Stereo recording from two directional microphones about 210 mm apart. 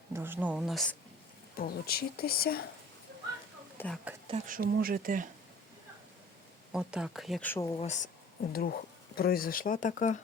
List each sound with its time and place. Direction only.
0.1 s speech: 10° right (ahead or behind)
1.5 s speech: 45° left (ahead or behind)
3.8 s speech: 5° left (ahead or behind)
4.4 s speech: 40° right (ahead or behind)
6.7 s speech: 5° right (ahead or behind); by 7.8 s 15° left (ahead or behind)
7.8 s speech: 35° left (ahead or behind)
8.5 s speech: 45° left (ahead or behind)